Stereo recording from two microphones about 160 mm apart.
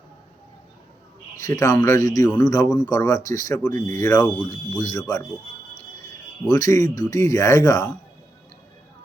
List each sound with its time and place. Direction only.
1.4 s speech: 20° left (ahead or behind)
6.5 s speech: 20° left (ahead or behind)